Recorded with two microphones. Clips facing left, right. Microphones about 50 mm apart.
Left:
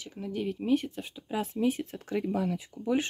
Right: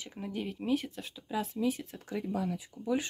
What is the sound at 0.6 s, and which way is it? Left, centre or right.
Speech, centre.